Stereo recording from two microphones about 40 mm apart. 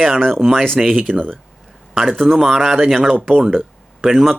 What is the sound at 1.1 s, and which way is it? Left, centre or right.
Speech, right.